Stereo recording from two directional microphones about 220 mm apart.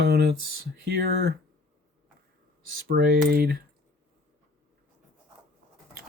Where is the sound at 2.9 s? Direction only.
45° right (ahead or behind).